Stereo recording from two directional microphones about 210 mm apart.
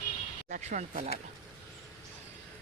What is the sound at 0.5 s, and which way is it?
Speech, 35° right (ahead or behind).